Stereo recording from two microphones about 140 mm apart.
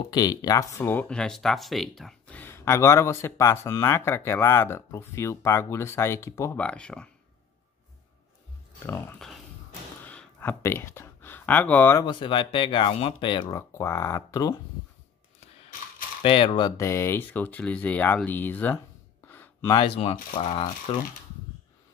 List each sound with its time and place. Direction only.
0.1 s speech: 25° left (ahead or behind)
6.6 s speech: 5° left (ahead or behind)
8.8 s speech: 20° left (ahead or behind)
10.0 s a sound: 15° left (ahead or behind)
12.0 s speech: 35° left (ahead or behind)
16.2 s speech: 40° left (ahead or behind); by 18.8 s 15° left (ahead or behind)
19.2 s gasp: 15° left (ahead or behind)
20.3 s speech: 40° left (ahead or behind)